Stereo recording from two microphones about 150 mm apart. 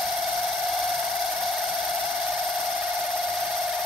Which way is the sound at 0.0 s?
Centre (ahead or behind).